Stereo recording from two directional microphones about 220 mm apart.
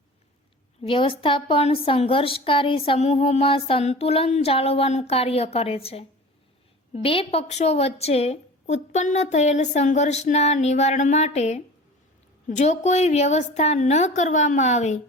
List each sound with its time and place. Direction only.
0.9 s a woman's voice: 25° left (ahead or behind)